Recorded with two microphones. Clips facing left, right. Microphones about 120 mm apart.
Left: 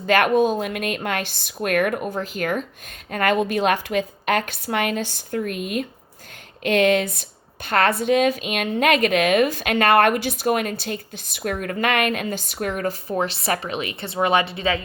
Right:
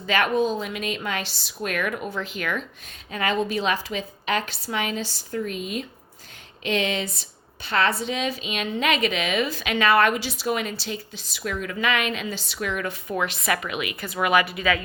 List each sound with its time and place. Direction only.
0.0 s a woman's voice: 50° left (ahead or behind); by 14.8 s 30° left (ahead or behind)